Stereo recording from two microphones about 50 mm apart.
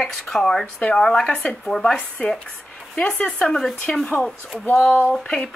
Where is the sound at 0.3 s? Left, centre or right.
Centre.